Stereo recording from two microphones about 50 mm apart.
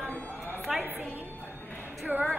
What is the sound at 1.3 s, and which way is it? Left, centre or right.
Music, left.